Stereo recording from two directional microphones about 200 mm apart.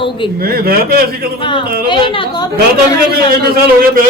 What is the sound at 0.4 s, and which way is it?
Speech, 50° right (ahead or behind).